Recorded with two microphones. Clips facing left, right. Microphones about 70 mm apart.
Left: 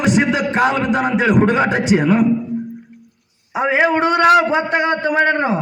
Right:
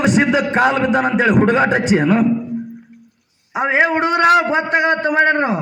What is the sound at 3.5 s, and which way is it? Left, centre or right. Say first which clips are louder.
Speech: even; right.